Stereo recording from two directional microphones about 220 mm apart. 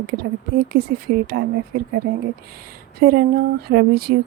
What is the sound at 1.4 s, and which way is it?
Speech, 45° right (ahead or behind).